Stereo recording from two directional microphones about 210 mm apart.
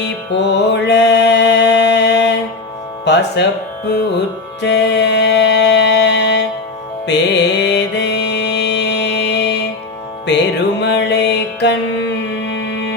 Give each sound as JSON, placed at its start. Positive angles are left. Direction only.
{"t": 0.4, "sound": "music", "side_deg": 55}
{"t": 3.0, "sound": "speech", "side_deg": 55}
{"t": 4.6, "sound": "music", "side_deg": 55}